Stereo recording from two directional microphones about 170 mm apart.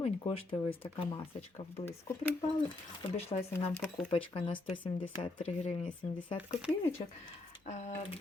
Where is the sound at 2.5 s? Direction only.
35° left (ahead or behind).